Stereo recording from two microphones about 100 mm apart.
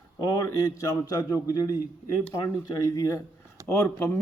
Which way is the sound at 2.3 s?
30° left (ahead or behind).